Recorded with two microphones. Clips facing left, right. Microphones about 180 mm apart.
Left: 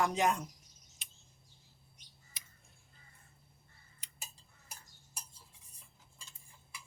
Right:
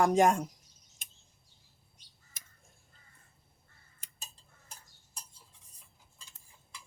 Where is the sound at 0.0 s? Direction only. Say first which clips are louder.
Right 7 dB; 45° right (ahead or behind).